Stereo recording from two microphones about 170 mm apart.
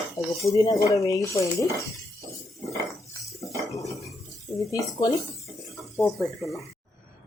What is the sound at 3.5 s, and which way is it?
Cutlery, 20° left (ahead or behind).